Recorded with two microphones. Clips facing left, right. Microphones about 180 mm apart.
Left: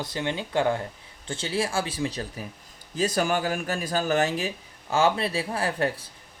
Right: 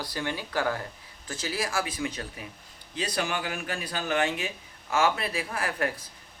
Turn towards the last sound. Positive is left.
turn(degrees=30)  # may be behind; listen again after turning